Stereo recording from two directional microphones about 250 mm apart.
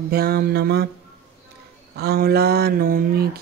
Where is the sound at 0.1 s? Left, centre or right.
Right.